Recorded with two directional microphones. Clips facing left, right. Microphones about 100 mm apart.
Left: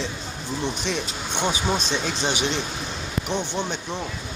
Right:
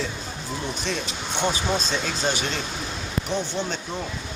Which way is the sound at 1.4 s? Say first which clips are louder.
Even; 15° left (ahead or behind).